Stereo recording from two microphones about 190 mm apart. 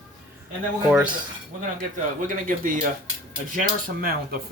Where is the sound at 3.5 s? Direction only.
45° right (ahead or behind).